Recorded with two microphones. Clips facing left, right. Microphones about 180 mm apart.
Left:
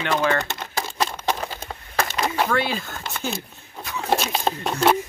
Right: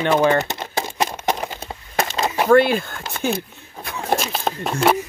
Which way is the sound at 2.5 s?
50° right (ahead or behind).